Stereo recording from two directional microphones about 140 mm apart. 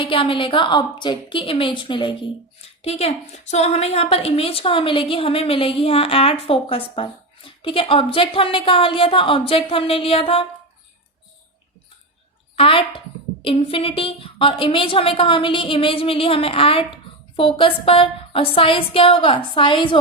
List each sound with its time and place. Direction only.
0.0 s a woman's voice: 40° left (ahead or behind)
2.6 s a woman's voice: 45° left (ahead or behind)
12.5 s a woman's voice: 40° left (ahead or behind)